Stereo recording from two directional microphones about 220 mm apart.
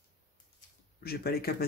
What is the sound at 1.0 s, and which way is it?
Speech, 45° left (ahead or behind).